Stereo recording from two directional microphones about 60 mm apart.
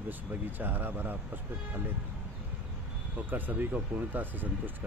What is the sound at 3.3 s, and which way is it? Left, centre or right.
Speech, right.